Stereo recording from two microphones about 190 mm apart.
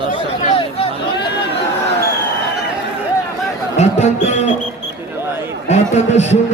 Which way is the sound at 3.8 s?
35° left (ahead or behind).